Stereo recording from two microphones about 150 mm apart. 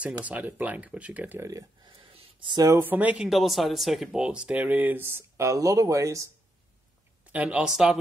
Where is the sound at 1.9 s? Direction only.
40° right (ahead or behind).